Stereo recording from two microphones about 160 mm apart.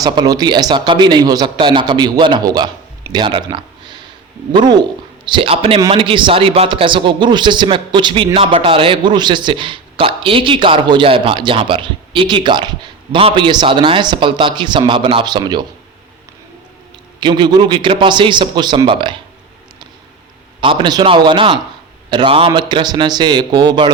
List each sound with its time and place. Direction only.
0.0 s a man's voice: 25° right (ahead or behind)
17.2 s a man's voice: 30° right (ahead or behind)
20.6 s a man's voice: 30° right (ahead or behind)